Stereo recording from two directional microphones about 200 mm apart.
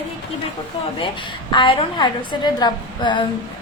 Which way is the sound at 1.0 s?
25° left (ahead or behind).